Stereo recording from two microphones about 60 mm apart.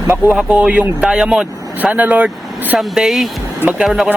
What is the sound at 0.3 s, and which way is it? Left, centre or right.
Speech, centre.